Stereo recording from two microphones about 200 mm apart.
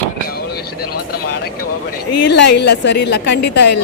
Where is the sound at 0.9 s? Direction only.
50° left (ahead or behind).